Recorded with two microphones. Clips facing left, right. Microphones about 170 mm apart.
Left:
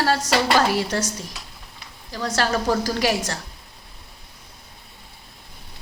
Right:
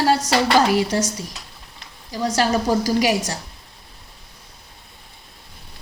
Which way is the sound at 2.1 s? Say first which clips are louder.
Right 3 dB; 10° right (ahead or behind).